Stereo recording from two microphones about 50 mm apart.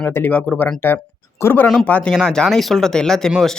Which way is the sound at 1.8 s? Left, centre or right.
Left.